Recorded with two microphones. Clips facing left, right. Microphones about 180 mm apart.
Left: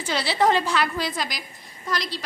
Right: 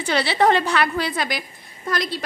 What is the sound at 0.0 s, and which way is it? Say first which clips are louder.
A woman's voice: right 3 dB; 60° right (ahead or behind).